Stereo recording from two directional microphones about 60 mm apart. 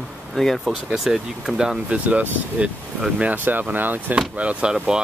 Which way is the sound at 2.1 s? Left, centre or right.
Right.